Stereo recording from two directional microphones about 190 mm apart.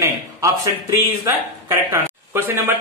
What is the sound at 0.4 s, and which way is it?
Speech, 15° right (ahead or behind).